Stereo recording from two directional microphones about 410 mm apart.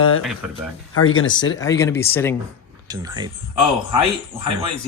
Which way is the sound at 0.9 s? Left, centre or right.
Left.